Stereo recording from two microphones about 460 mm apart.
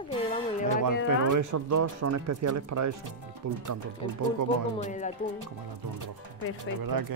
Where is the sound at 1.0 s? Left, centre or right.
Right.